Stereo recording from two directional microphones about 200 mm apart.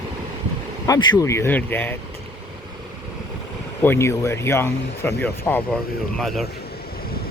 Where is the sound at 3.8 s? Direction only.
10° left (ahead or behind).